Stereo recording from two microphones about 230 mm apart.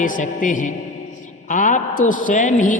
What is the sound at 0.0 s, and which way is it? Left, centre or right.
A man's voice, left.